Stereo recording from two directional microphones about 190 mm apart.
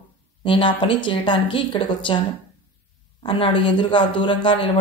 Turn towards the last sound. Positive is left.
turn(degrees=25)  # may be behind; listen again after turning